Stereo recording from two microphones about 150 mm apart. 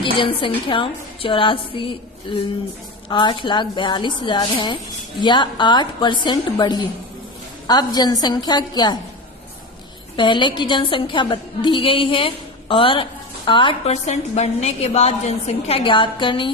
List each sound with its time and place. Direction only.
0.0 s a woman's voice: 35° left (ahead or behind)
10.2 s a woman's voice: 30° left (ahead or behind)
13.9 s a woman's voice: 50° left (ahead or behind); by 16.5 s 35° left (ahead or behind)